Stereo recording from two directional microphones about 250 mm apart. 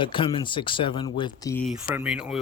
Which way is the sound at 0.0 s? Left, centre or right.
Centre.